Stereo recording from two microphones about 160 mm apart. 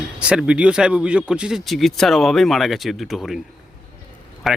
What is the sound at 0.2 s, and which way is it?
Speech, 5° right (ahead or behind).